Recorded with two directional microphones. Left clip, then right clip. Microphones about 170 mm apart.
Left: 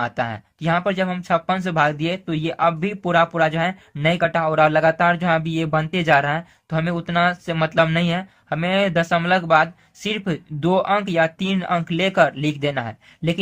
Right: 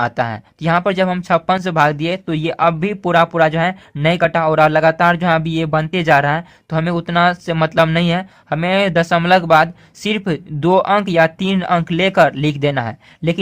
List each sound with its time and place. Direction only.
0.0 s speech: 30° right (ahead or behind)